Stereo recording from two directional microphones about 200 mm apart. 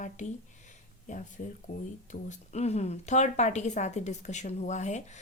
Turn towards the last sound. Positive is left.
turn(degrees=35)  # may be behind; listen again after turning